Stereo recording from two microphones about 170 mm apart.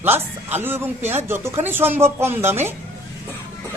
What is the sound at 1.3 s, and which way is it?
A woman's voice, 15° right (ahead or behind).